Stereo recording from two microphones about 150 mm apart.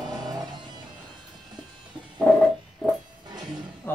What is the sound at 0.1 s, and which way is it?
Music, 25° right (ahead or behind).